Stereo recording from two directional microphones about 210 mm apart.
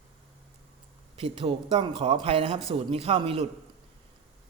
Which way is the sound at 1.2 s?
25° right (ahead or behind).